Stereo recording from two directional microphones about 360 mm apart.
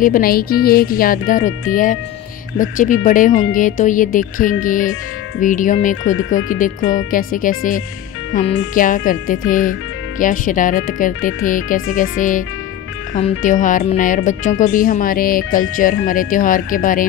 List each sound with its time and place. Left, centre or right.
0.0 s speech: left
2.6 s speech: left